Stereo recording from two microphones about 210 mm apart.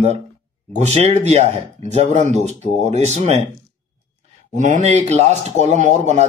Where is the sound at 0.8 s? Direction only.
30° right (ahead or behind).